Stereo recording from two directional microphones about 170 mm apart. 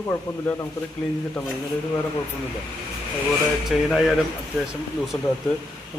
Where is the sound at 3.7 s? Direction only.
Centre (ahead or behind).